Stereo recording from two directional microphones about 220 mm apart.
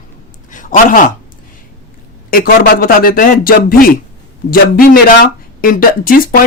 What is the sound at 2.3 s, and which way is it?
Speech, 40° left (ahead or behind).